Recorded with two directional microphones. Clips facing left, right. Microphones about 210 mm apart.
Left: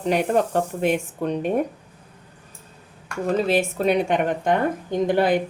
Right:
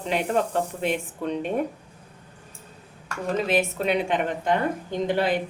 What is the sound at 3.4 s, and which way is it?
Speech, 30° left (ahead or behind).